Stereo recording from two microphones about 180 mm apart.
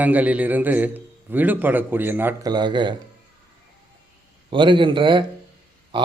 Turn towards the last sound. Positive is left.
turn(degrees=-25)  # may be behind; listen again after turning